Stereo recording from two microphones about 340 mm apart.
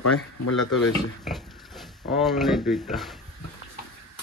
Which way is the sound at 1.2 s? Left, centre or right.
Centre.